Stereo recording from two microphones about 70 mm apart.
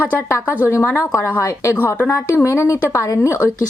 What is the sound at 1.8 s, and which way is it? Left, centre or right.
Speech, left.